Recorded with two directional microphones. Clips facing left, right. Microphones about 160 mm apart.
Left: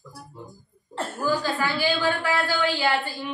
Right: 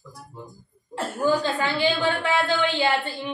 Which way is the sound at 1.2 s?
25° right (ahead or behind).